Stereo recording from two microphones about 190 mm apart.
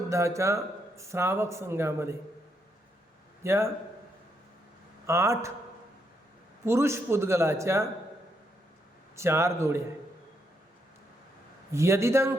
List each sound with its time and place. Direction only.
0.1 s speech: 15° right (ahead or behind)
3.4 s a man's voice: 15° right (ahead or behind)
5.0 s speech: 15° right (ahead or behind)
6.7 s speech: 15° right (ahead or behind)
9.1 s speech: 15° right (ahead or behind)
11.7 s speech: 15° right (ahead or behind)